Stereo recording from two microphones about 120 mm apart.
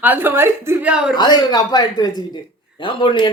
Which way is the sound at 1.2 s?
35° left (ahead or behind).